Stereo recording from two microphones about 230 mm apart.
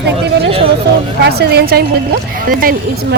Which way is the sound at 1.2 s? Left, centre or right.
Right.